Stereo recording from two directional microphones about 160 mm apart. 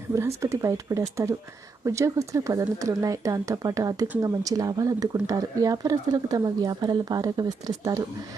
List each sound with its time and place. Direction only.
0.1 s speech: 15° right (ahead or behind)